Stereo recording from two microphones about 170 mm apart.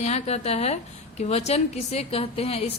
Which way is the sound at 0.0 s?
40° left (ahead or behind).